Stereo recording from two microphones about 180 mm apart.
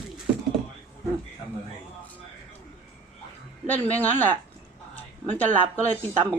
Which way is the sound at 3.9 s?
10° left (ahead or behind).